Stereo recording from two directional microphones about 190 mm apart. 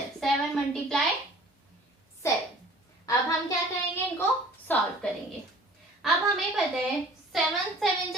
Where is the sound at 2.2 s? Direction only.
15° left (ahead or behind).